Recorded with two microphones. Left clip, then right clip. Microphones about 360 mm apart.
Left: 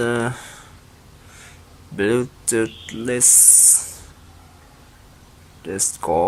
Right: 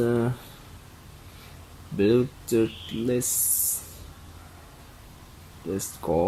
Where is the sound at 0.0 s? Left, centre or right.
Left.